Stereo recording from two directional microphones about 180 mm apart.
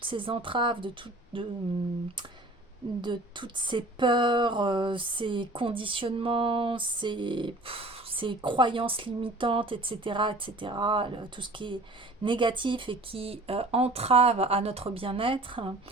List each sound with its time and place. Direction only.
0.0 s speech: 30° right (ahead or behind)
3.0 s speech: 25° right (ahead or behind)